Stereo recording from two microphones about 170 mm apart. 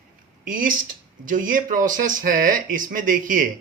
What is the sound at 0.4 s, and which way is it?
Speech, 55° right (ahead or behind).